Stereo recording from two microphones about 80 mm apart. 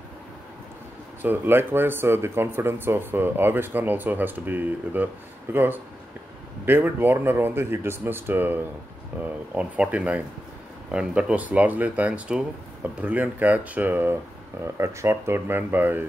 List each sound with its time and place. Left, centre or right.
1.2 s speech: right
14.6 s speech: right